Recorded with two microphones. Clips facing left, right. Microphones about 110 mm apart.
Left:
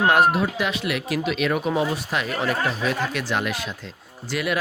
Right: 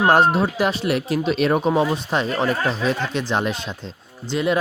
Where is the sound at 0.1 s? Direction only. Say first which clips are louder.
Right 2 dB; 30° right (ahead or behind).